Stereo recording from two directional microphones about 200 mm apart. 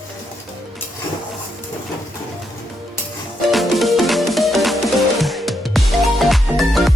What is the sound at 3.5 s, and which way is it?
Music, centre (ahead or behind).